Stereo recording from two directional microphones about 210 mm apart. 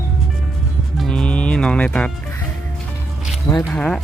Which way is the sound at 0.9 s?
5° left (ahead or behind).